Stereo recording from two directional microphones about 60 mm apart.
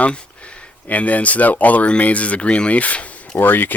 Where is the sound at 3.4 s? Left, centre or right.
Left.